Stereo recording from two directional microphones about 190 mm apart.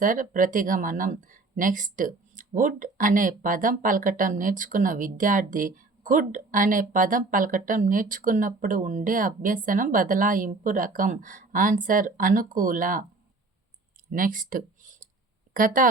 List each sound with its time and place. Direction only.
0.0 s speech: 45° right (ahead or behind)
14.1 s speech: 45° right (ahead or behind)